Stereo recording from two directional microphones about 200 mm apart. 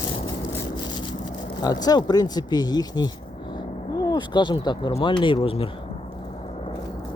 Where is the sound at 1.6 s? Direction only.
20° left (ahead or behind).